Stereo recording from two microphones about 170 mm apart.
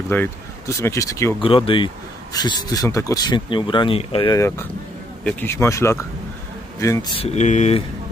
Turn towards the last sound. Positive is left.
turn(degrees=40)  # may be behind; listen again after turning